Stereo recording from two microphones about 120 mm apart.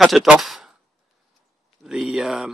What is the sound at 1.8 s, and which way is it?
Speech, 5° right (ahead or behind).